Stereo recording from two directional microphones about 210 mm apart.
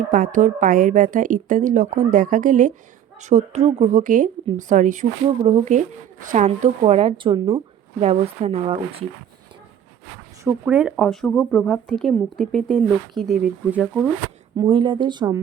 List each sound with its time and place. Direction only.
0.0 s speech: 40° right (ahead or behind)
10.4 s speech: 5° right (ahead or behind)
14.5 s speech: 20° right (ahead or behind)